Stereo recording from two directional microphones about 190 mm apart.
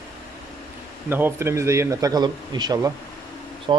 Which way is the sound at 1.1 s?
10° right (ahead or behind).